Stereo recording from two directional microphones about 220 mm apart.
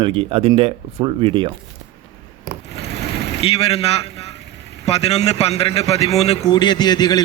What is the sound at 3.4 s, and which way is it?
Speech, 25° left (ahead or behind).